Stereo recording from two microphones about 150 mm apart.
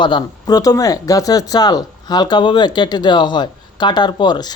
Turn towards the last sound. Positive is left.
turn(degrees=30)  # may be behind; listen again after turning